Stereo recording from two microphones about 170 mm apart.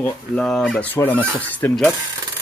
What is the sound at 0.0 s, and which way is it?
Speech, 5° left (ahead or behind).